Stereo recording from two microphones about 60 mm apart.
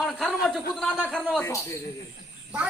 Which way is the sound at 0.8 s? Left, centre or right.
Centre.